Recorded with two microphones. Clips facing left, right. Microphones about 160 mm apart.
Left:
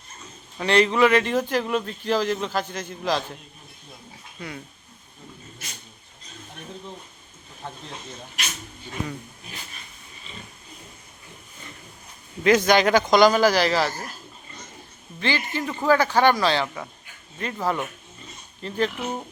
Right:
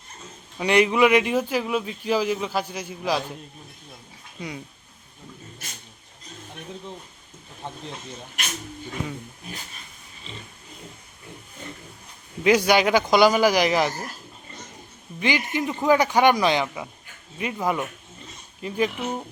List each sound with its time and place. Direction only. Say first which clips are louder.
0.6 s speech: even; 10° right (ahead or behind)
4.4 s speech: right 2 dB; 15° right (ahead or behind)
7.6 s speech: right 1 dB; 20° right (ahead or behind)
12.4 s speech: even; 10° right (ahead or behind)
15.2 s speech: right 2 dB; 15° right (ahead or behind)